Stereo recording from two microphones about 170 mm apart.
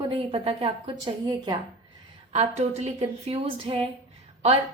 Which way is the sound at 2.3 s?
40° right (ahead or behind).